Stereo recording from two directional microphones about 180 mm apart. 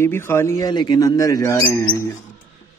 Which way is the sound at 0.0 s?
15° left (ahead or behind).